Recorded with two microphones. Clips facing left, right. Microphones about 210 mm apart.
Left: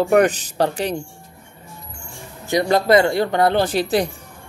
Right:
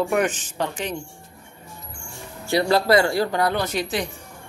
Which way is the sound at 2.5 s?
20° left (ahead or behind).